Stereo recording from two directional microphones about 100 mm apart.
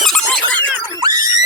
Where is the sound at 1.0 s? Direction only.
40° right (ahead or behind).